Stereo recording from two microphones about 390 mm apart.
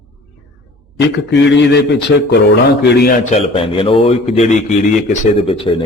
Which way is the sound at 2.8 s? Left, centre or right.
Left.